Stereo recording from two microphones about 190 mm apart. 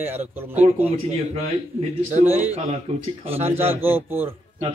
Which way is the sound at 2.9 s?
35° right (ahead or behind).